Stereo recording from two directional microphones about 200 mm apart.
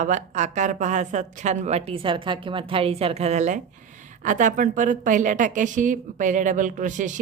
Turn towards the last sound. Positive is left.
turn(degrees=-40)  # may be behind; listen again after turning